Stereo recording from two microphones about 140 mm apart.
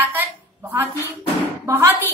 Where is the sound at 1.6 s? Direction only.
20° right (ahead or behind).